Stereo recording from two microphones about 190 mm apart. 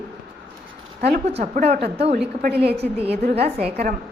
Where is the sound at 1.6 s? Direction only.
55° right (ahead or behind).